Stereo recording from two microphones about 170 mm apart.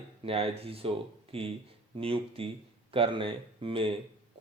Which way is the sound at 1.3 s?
35° right (ahead or behind).